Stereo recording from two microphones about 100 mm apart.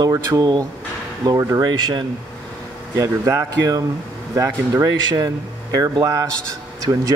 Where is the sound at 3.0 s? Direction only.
35° right (ahead or behind).